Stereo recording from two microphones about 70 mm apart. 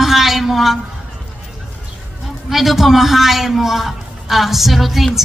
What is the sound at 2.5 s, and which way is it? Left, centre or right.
A woman's voice, centre.